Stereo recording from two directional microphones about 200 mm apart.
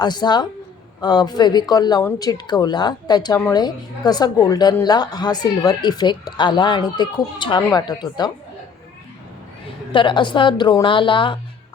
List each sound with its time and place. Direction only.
0.0 s speech: 20° left (ahead or behind)
9.9 s speech: 25° left (ahead or behind)